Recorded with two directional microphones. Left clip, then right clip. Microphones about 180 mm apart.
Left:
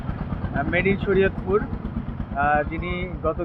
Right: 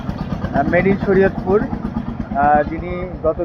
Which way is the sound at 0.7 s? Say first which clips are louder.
Right 5 dB; 15° left (ahead or behind).